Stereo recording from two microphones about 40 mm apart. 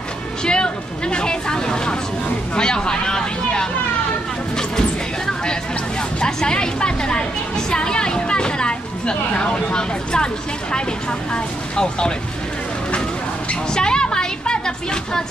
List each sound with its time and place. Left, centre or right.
0.5 s vehicle: left
2.5 s speech: left
4.6 s music: centre
6.2 s a woman's voice: centre
13.7 s a sound: centre